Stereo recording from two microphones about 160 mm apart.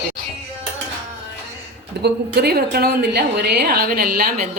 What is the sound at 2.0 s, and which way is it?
A woman's voice, 90° right.